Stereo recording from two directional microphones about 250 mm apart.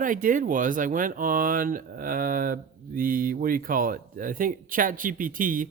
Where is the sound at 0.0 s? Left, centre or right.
Right.